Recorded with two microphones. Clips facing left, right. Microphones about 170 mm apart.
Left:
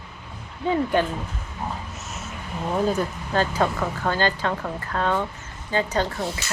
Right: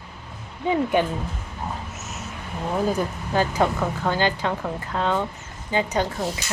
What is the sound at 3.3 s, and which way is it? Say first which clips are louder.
Speech: right 1 dB; 10° right (ahead or behind).